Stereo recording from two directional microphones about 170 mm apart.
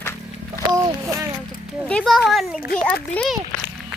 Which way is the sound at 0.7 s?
20° right (ahead or behind).